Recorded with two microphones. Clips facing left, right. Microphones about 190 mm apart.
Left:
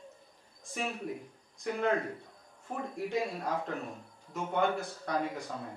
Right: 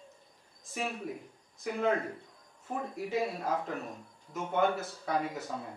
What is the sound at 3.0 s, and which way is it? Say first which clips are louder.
A man's voice: right 1 dB; 5° right (ahead or behind).